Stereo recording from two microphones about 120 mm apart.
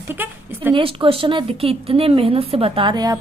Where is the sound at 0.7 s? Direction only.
50° right (ahead or behind).